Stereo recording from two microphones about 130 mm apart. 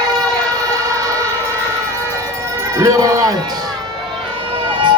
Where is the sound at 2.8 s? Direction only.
25° right (ahead or behind).